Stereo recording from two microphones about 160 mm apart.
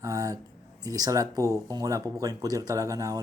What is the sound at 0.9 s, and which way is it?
Speech, 25° right (ahead or behind).